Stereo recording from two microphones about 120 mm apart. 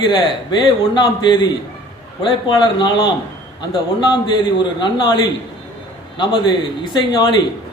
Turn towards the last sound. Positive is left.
turn(degrees=40)  # may be behind; listen again after turning